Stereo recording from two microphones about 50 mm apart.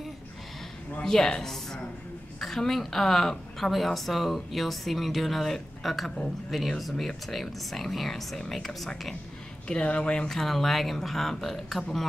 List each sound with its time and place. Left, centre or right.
1.0 s a woman's voice: centre
9.7 s speech: left
10.2 s a woman's voice: centre